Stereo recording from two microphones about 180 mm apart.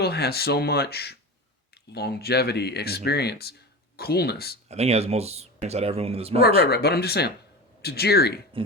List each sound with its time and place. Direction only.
0.0 s speech: 60° left (ahead or behind)
4.7 s speech: 35° right (ahead or behind)
6.6 s speech: 65° left (ahead or behind)